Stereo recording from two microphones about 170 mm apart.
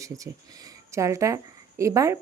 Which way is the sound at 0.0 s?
20° right (ahead or behind).